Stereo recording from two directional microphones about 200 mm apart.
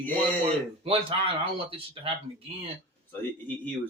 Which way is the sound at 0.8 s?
25° right (ahead or behind).